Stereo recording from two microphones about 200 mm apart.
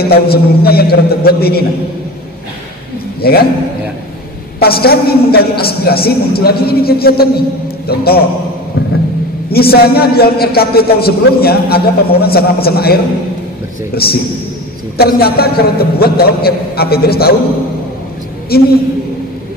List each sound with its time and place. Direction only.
0.0 s a man's voice: 50° left (ahead or behind)
3.2 s a man's voice: 50° left (ahead or behind)
4.6 s a man's voice: 50° left (ahead or behind)
9.5 s a man's voice: 50° left (ahead or behind)
18.5 s a man's voice: 50° left (ahead or behind)